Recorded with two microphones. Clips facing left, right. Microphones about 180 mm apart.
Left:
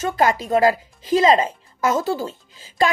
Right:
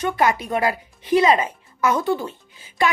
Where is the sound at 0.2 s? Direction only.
35° left (ahead or behind).